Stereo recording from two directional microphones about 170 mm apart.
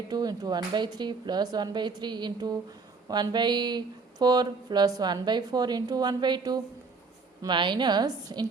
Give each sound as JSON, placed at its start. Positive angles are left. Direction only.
{"t": 0.1, "sound": "speech", "side_deg": -20}